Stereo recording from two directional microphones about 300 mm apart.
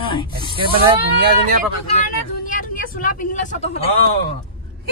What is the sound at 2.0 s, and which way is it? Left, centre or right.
Speech, left.